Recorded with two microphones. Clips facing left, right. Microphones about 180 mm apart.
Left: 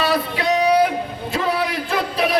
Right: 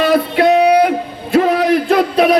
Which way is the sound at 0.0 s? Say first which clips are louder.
Right 8 dB; 55° right (ahead or behind).